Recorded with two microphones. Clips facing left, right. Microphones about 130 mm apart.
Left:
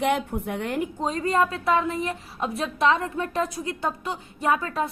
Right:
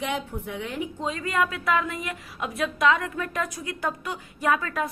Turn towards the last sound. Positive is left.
turn(degrees=30)  # may be behind; listen again after turning